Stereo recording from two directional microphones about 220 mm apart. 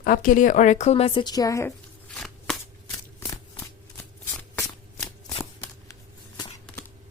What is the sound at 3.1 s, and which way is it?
Shuffling cards, 10° left (ahead or behind).